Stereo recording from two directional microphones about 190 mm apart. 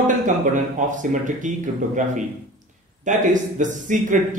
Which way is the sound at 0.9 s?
40° right (ahead or behind).